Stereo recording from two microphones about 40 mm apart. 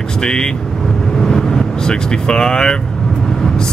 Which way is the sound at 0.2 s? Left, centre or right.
Centre.